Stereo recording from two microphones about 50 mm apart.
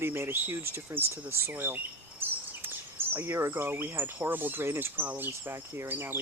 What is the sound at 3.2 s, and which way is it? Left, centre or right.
Speech, right.